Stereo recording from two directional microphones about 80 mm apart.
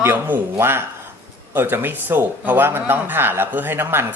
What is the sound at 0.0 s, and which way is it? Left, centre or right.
Speech, right.